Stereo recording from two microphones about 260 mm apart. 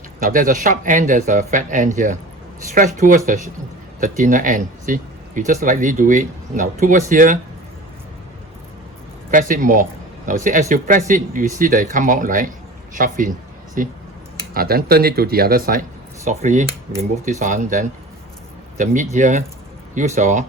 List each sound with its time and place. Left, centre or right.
0.2 s speech: right
9.3 s speech: right